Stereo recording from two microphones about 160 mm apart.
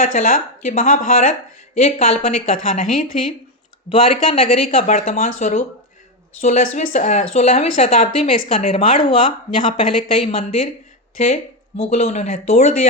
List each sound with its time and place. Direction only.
0.0 s speech: 55° left (ahead or behind)
3.9 s a woman's voice: 35° left (ahead or behind)
11.8 s speech: 45° left (ahead or behind)